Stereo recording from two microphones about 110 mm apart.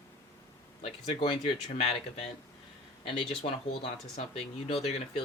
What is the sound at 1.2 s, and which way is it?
Speech, 60° left (ahead or behind).